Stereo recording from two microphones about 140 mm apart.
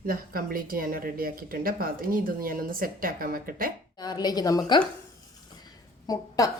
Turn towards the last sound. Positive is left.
turn(degrees=25)  # may be behind; listen again after turning